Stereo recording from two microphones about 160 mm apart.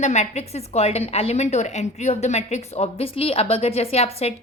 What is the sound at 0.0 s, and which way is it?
A woman's voice, 45° left (ahead or behind).